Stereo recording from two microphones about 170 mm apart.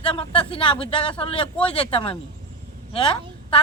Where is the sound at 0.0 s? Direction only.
30° left (ahead or behind).